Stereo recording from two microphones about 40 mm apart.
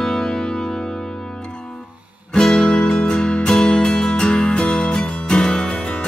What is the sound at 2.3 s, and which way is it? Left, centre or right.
Music, centre.